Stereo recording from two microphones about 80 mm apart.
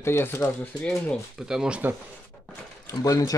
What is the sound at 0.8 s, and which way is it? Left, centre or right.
Speech, centre.